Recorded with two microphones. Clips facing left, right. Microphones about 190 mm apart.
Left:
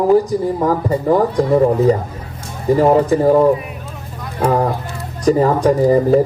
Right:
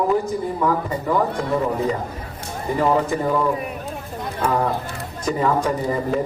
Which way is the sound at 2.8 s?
35° left (ahead or behind).